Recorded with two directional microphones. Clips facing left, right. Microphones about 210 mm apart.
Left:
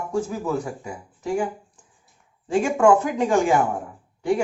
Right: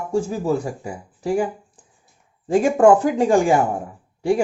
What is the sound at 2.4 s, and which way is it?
Speech, 40° right (ahead or behind).